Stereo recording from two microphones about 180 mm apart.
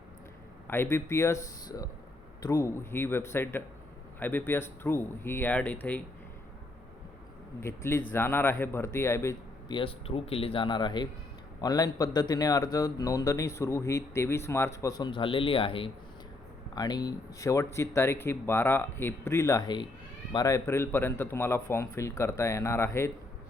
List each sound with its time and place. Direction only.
0.7 s speech: 15° left (ahead or behind)
7.6 s speech: 15° left (ahead or behind)
9.7 s speech: 30° left (ahead or behind); by 23.1 s 15° left (ahead or behind)